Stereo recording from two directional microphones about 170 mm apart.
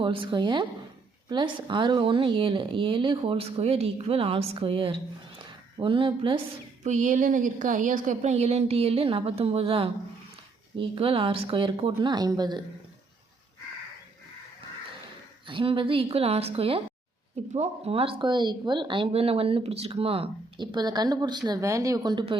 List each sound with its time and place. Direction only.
0.0 s speech: 30° right (ahead or behind)
5.4 s a sound: 30° right (ahead or behind)
6.8 s a woman's voice: 45° right (ahead or behind); by 12.6 s 25° right (ahead or behind)
15.4 s a woman's voice: 30° right (ahead or behind)